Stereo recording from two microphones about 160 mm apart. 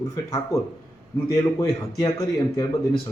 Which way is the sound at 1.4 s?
20° left (ahead or behind).